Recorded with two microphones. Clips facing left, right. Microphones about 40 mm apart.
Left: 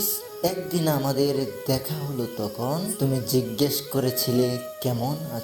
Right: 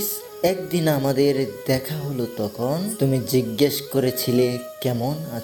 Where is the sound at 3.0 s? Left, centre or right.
Right.